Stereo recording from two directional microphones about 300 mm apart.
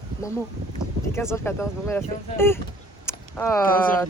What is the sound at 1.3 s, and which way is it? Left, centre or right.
Speech, centre.